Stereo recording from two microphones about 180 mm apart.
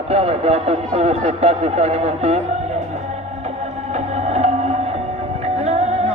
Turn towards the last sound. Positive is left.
turn(degrees=-35)  # may be behind; listen again after turning